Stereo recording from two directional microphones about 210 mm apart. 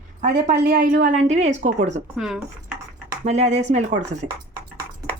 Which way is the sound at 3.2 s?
30° right (ahead or behind).